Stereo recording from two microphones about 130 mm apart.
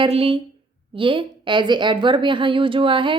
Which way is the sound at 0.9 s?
40° right (ahead or behind).